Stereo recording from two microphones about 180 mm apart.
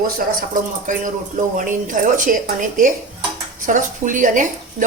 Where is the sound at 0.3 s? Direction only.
45° right (ahead or behind).